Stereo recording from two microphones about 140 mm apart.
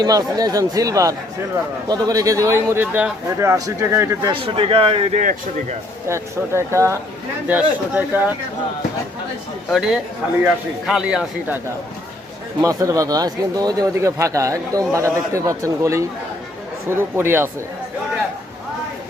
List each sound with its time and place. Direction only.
0.0 s speech: 25° right (ahead or behind)
4.3 s a man's voice: 40° right (ahead or behind)
5.1 s speech: 70° right (ahead or behind)
6.1 s speech: 20° right (ahead or behind)
9.6 s a man's voice: centre (ahead or behind)
12.6 s speech: 25° right (ahead or behind)